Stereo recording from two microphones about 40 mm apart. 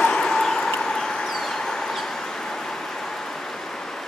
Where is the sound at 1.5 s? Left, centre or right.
Centre.